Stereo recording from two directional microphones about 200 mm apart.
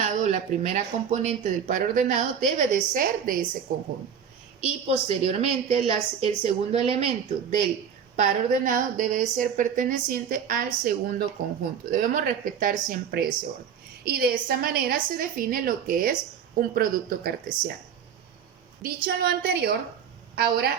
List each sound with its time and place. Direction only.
0.0 s a woman's voice: 35° right (ahead or behind)
4.9 s speech: 30° right (ahead or behind)
8.1 s a woman's voice: 40° right (ahead or behind)
19.0 s a woman's voice: 50° right (ahead or behind)